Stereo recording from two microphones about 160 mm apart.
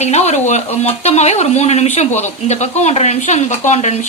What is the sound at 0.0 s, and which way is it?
A woman's voice, 45° left (ahead or behind).